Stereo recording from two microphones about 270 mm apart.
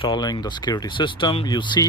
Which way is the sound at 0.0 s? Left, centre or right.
Centre.